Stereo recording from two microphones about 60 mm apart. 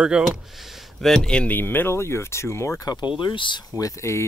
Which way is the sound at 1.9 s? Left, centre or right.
Left.